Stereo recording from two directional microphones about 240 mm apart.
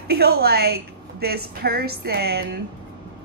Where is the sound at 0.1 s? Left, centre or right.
Right.